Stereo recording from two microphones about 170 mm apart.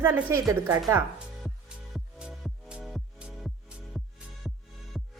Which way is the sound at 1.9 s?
5° right (ahead or behind).